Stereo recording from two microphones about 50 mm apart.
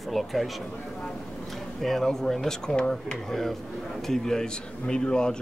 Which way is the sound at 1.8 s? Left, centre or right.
Centre.